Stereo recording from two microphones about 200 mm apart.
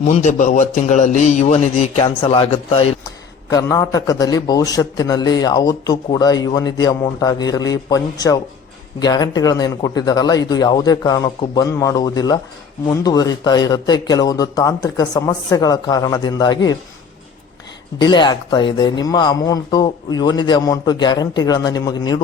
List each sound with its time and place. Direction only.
0.1 s a man's voice: 35° left (ahead or behind)
3.5 s a man's voice: 15° left (ahead or behind)
18.0 s a man's voice: 20° left (ahead or behind)